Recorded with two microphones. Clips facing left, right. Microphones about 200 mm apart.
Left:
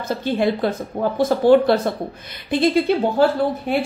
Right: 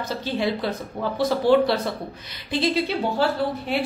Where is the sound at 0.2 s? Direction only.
50° left (ahead or behind).